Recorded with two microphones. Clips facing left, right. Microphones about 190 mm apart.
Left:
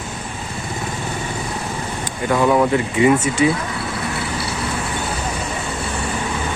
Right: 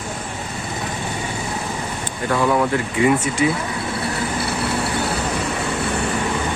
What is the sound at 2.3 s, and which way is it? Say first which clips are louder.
Speech: left 3 dB; 20° left (ahead or behind).